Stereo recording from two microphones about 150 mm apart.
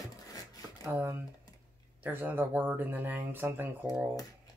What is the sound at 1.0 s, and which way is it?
Computer keyboard, 15° right (ahead or behind).